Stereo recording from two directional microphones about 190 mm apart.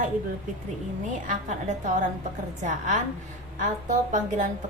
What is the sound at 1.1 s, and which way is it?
A woman's voice, 40° right (ahead or behind).